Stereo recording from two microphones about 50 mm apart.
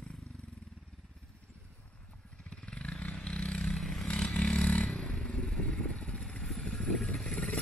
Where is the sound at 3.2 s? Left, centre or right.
Left.